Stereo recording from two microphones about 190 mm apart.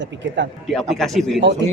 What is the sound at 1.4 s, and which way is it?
Speech, 70° right (ahead or behind).